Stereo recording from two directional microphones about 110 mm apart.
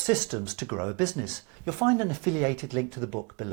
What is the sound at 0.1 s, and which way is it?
Speech, 20° right (ahead or behind).